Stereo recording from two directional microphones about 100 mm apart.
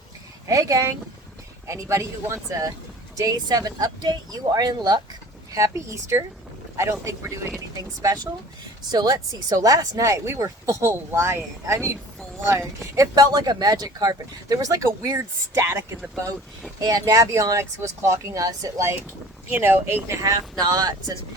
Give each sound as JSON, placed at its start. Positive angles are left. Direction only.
{"t": 0.4, "sound": "speech", "side_deg": -35}
{"t": 8.0, "sound": "speech", "side_deg": -40}
{"t": 16.8, "sound": "speech", "side_deg": -35}
{"t": 19.5, "sound": "speech", "side_deg": -20}
{"t": 20.2, "sound": "speech", "side_deg": -40}